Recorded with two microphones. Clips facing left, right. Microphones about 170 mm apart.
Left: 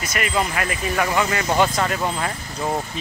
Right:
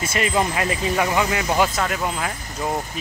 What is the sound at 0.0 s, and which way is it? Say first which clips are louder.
Speech: right 2 dB; 25° right (ahead or behind).